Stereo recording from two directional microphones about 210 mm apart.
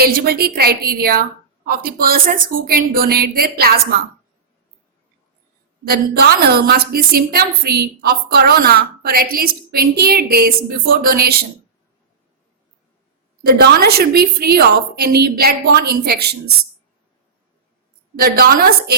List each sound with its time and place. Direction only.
0.0 s a woman's voice: 45° right (ahead or behind)
5.9 s a woman's voice: 45° right (ahead or behind)
13.4 s a woman's voice: 45° right (ahead or behind)
18.2 s a woman's voice: 45° right (ahead or behind)